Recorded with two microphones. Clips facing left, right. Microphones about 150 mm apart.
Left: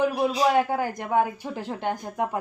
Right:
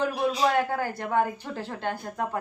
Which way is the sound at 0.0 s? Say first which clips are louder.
Left 3 dB; 15° left (ahead or behind).